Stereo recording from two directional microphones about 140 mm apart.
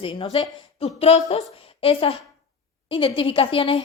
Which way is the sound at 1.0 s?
50° left (ahead or behind).